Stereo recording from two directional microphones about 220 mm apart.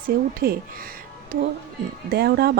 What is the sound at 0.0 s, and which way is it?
Speech, 40° right (ahead or behind).